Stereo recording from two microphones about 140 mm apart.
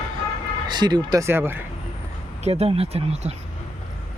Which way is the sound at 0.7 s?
30° right (ahead or behind).